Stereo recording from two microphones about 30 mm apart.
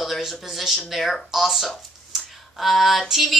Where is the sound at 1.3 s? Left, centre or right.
Centre.